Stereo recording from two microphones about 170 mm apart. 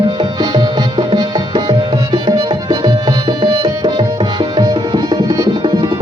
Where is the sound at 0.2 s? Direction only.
25° right (ahead or behind).